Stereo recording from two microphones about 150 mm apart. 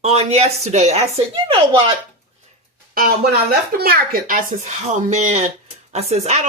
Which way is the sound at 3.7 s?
85° right.